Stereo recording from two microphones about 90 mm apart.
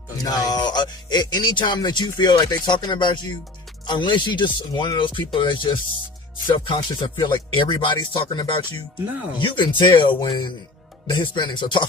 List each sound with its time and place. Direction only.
0.2 s speech: 50° left (ahead or behind); by 10.2 s 65° left (ahead or behind)
10.2 s speech: 50° left (ahead or behind)